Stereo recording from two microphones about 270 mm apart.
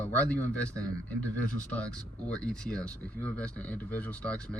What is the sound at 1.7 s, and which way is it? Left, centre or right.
Speech, centre.